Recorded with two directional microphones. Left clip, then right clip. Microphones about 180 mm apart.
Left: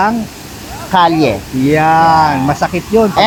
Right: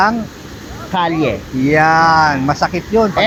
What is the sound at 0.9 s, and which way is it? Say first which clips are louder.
Speech: left 6 dB; 60° left (ahead or behind).